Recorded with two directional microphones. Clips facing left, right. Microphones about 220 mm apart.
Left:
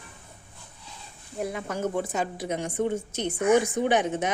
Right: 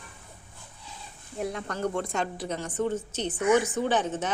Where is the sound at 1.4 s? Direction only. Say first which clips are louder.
Left 1 dB; 5° left (ahead or behind).